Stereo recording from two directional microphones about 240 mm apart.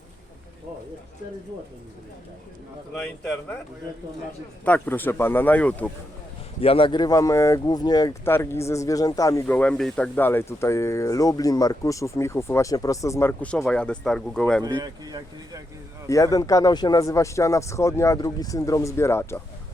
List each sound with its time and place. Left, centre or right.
2.9 s speech: centre
4.6 s speech: centre
6.6 s speech: left; by 14.6 s centre
14.8 s speech: centre
16.0 s speech: centre